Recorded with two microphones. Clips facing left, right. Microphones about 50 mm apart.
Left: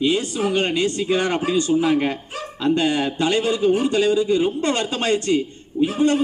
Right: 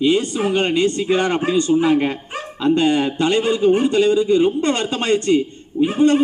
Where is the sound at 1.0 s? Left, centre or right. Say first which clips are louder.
Right 3 dB; centre.